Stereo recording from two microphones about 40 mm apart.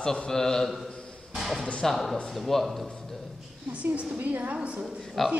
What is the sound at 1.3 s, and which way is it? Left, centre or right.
Music, centre.